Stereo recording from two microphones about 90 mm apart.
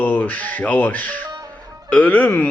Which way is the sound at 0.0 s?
20° left (ahead or behind).